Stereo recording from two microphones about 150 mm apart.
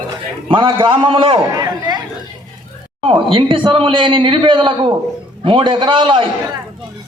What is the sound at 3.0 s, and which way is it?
A man's voice, 35° right (ahead or behind).